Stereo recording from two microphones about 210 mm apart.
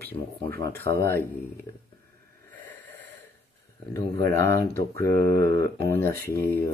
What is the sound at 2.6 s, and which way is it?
Snort, 10° left (ahead or behind).